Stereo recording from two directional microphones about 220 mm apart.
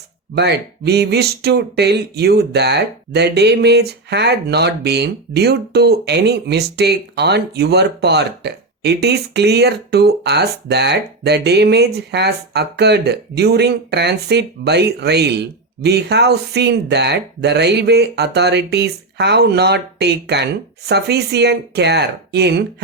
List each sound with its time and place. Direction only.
0.3 s speech: 50° right (ahead or behind)